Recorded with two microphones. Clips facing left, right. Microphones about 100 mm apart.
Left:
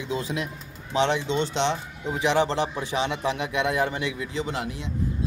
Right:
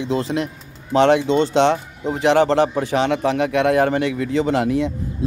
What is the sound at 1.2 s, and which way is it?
A man's voice, 45° right (ahead or behind).